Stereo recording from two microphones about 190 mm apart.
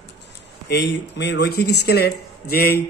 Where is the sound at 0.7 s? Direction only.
65° left (ahead or behind).